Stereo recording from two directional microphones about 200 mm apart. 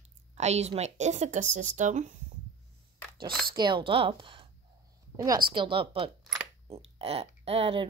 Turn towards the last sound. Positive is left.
turn(degrees=-30)  # may be behind; listen again after turning